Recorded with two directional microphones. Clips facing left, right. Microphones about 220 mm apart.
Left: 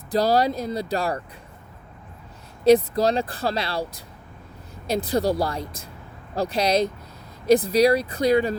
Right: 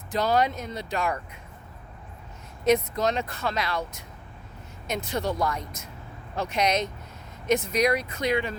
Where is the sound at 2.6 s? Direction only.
30° left (ahead or behind).